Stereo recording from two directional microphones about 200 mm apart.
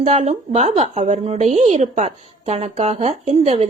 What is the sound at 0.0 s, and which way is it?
A woman's voice, 30° right (ahead or behind).